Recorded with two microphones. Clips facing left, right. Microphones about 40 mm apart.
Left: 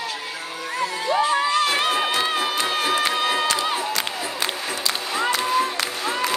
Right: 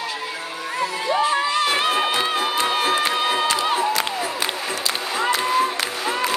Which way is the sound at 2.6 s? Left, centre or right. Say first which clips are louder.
Right 3 dB; right.